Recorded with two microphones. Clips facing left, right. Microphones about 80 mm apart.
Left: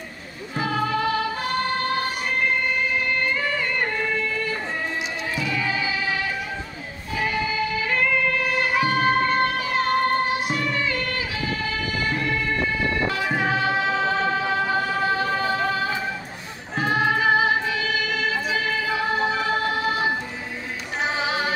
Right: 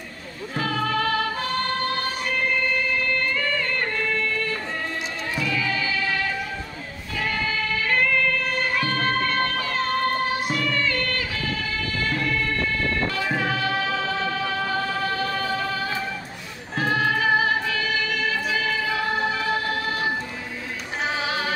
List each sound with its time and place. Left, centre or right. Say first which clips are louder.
0.6 s music: left 1 dB; centre
3.0 s music: left 1 dB; centre
7.2 s music: left 2 dB; centre